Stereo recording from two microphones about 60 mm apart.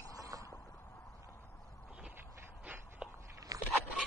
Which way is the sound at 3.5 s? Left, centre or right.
Right.